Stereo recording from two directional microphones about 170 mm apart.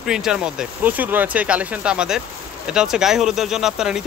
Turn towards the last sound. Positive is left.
turn(degrees=-5)  # may be behind; listen again after turning